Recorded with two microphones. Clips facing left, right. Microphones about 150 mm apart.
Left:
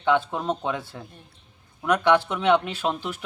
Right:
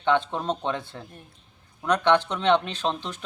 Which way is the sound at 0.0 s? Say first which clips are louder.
Left 1 dB; 10° left (ahead or behind).